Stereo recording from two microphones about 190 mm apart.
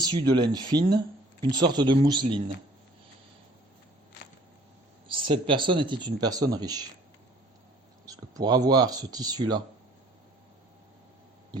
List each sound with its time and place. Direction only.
0.0 s speech: 20° right (ahead or behind)
5.0 s speech: 25° right (ahead or behind)
8.0 s speech: 20° right (ahead or behind)